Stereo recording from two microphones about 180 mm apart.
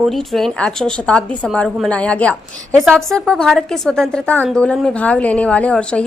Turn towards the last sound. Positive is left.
turn(degrees=5)  # may be behind; listen again after turning